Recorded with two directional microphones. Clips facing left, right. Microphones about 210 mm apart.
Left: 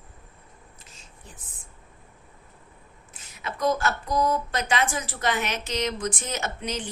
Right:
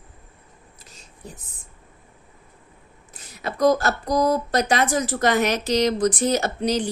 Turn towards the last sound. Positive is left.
turn(degrees=-35)  # may be behind; listen again after turning